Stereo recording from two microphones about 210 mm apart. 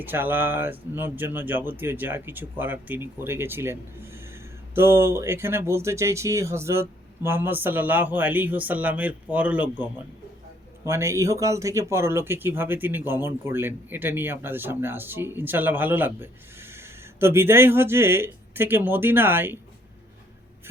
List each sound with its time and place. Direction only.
0.0 s speech: 10° right (ahead or behind)